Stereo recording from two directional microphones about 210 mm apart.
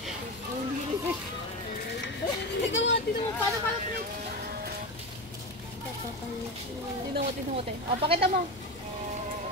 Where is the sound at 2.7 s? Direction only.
60° left (ahead or behind).